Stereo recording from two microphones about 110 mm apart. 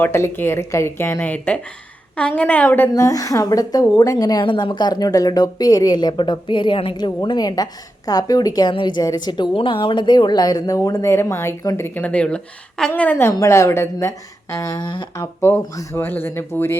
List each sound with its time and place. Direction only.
0.0 s a woman's voice: 20° left (ahead or behind)
2.9 s speech: 30° left (ahead or behind)
11.9 s a woman's voice: 10° left (ahead or behind); by 15.0 s 40° left (ahead or behind)
15.2 s a woman's voice: 20° left (ahead or behind)